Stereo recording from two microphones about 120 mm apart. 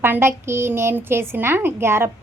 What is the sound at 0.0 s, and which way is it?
A woman's voice, 20° right (ahead or behind).